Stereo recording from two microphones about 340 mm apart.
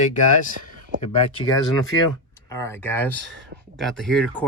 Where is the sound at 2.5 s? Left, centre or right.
Centre.